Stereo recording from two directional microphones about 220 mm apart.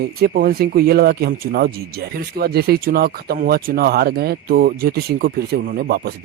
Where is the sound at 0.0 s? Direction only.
45° right (ahead or behind).